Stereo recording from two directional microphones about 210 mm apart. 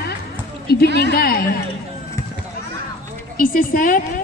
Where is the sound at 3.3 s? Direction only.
40° left (ahead or behind).